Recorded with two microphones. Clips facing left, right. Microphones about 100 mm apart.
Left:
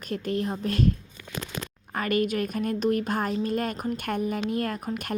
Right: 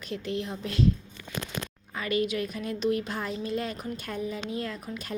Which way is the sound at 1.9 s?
50° left (ahead or behind).